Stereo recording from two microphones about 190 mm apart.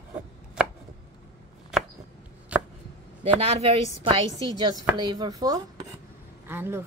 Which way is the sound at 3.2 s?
30° right (ahead or behind).